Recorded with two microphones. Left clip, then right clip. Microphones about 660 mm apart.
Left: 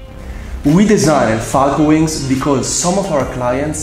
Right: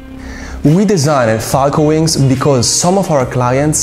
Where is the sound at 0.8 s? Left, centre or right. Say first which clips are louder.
Even; right.